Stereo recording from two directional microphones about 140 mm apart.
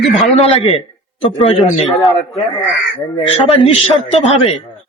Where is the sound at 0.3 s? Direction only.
45° left (ahead or behind).